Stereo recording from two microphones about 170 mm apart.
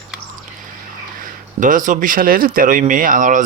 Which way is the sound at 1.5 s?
50° right (ahead or behind).